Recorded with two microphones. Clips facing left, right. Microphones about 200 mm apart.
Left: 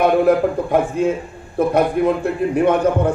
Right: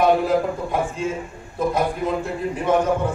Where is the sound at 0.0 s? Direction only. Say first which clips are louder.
Left 4 dB; 60° left (ahead or behind).